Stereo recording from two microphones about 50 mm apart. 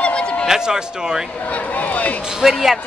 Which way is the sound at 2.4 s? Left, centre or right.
Centre.